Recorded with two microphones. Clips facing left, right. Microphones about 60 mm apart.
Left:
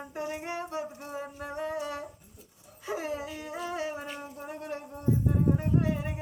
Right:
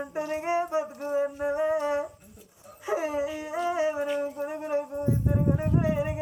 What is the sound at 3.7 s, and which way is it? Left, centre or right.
Humming, right.